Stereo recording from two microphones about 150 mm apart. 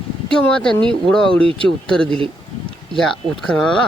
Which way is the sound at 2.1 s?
35° right (ahead or behind).